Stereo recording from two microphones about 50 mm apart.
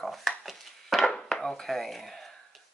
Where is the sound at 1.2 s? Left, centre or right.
Centre.